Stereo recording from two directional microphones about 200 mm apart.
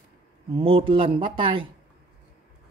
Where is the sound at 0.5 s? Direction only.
30° right (ahead or behind).